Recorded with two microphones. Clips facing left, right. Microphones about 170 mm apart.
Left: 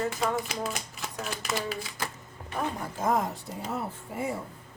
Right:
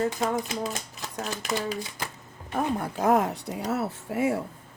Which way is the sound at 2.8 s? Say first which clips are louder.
Right 5 dB; 70° right (ahead or behind).